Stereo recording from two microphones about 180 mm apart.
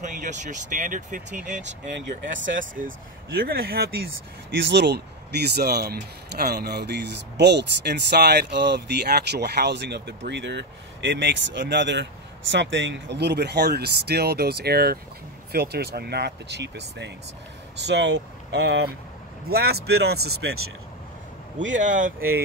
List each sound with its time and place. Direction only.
0.0 s speech: 45° right (ahead or behind)
3.3 s speech: 55° right (ahead or behind)
4.6 s speech: 75° right (ahead or behind)
21.5 s speech: 45° right (ahead or behind)